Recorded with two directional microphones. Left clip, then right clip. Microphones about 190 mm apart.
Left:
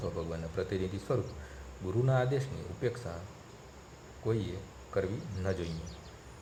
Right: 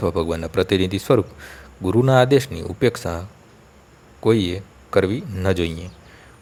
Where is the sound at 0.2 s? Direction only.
45° right (ahead or behind).